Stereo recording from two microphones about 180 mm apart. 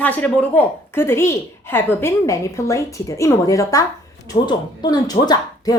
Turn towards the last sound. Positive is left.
turn(degrees=20)  # may be behind; listen again after turning